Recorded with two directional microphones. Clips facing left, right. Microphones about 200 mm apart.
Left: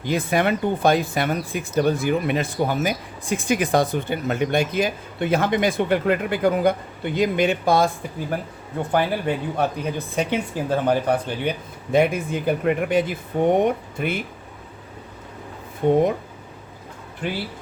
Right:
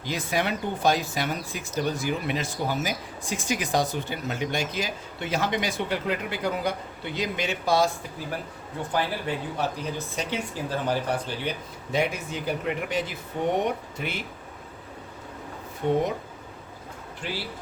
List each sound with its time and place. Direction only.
0.0 s speech: 55° left (ahead or behind)
8.9 s speech: 55° left (ahead or behind)
15.8 s speech: 50° left (ahead or behind)
17.2 s speech: 55° left (ahead or behind)